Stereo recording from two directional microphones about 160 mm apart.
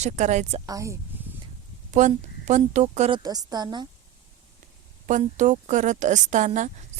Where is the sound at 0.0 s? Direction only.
45° right (ahead or behind).